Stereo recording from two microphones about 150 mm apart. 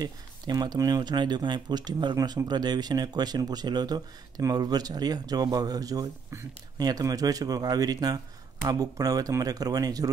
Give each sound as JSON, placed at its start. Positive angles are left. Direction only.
{"t": 0.0, "sound": "speech", "side_deg": -25}